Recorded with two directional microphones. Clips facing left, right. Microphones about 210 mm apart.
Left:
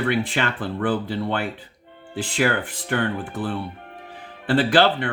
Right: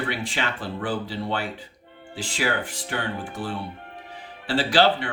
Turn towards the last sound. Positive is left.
turn(degrees=55)  # may be behind; listen again after turning